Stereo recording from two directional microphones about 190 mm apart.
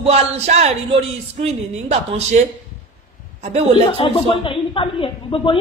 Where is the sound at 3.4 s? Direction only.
35° right (ahead or behind).